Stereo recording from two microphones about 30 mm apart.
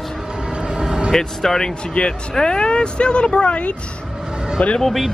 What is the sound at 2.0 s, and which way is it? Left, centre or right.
Speech, left.